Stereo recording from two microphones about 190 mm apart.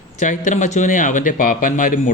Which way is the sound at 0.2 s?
40° left (ahead or behind).